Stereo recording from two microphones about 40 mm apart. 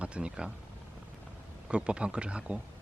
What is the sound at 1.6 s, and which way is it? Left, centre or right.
Speech, right.